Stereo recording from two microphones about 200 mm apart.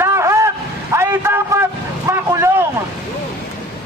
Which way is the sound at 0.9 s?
10° right (ahead or behind).